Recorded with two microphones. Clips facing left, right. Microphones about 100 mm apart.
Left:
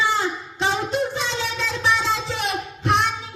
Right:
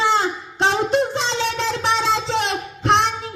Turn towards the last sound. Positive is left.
turn(degrees=-75)  # may be behind; listen again after turning